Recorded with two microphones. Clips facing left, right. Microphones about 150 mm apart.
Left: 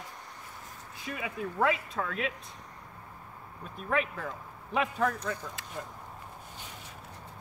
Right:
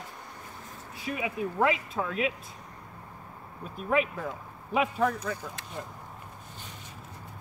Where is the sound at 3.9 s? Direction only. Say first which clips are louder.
Right 4 dB; 10° right (ahead or behind).